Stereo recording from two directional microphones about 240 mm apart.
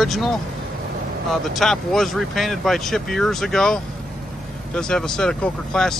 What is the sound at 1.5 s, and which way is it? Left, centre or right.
Speech, centre.